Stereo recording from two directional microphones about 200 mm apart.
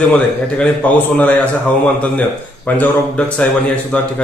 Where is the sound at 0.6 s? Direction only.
5° left (ahead or behind).